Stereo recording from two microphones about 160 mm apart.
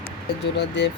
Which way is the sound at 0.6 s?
90° left.